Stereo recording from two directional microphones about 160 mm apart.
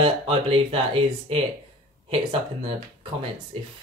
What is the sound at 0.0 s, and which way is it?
Speech, 35° right (ahead or behind).